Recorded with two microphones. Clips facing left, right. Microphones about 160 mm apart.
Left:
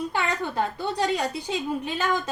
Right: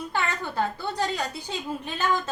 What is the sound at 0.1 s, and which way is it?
A woman's voice, 15° left (ahead or behind).